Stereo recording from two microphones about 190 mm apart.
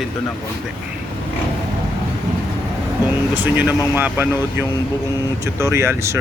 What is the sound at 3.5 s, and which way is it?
Speech, 10° right (ahead or behind).